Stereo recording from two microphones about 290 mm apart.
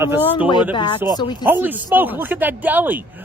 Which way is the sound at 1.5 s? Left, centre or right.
Centre.